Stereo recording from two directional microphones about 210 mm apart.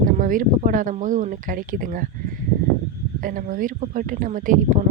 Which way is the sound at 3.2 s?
40° right (ahead or behind).